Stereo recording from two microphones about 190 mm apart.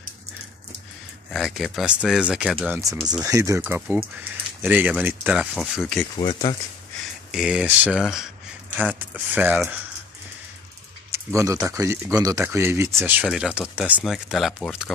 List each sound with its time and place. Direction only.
1.3 s speech: centre (ahead or behind)
2.8 s speech: 20° right (ahead or behind); by 6.0 s centre (ahead or behind)
6.1 s speech: 25° left (ahead or behind)
7.2 s speech: 5° right (ahead or behind)
11.1 s speech: 15° right (ahead or behind); by 14.9 s centre (ahead or behind)